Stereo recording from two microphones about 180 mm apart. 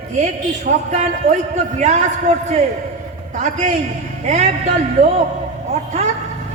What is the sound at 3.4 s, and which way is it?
A man's voice, 40° right (ahead or behind).